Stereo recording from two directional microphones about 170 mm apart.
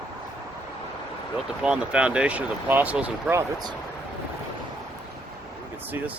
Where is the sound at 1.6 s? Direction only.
5° right (ahead or behind).